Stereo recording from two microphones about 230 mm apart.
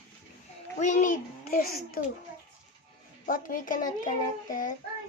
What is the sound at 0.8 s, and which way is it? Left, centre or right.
A child's voice, left.